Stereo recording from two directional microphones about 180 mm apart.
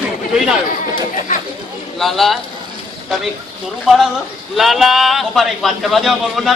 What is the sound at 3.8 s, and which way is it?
A man's voice, centre (ahead or behind).